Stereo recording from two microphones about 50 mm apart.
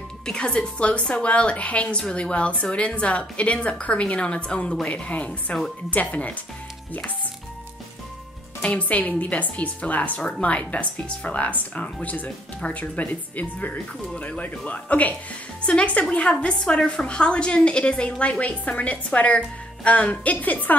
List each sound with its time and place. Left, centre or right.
0.3 s a woman's voice: centre
8.6 s a woman's voice: left
18.4 s a woman's voice: left